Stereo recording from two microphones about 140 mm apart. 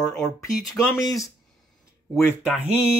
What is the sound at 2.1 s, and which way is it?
Speech, centre (ahead or behind).